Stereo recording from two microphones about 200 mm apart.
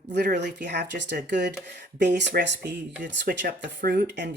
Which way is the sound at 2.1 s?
55° right (ahead or behind).